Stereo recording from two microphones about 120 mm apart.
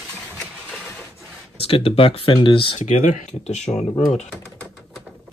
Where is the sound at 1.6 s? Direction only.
50° left (ahead or behind).